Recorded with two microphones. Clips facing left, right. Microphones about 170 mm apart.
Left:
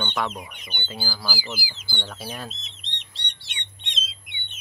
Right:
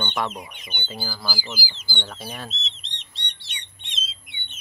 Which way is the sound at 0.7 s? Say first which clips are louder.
Even; centre (ahead or behind).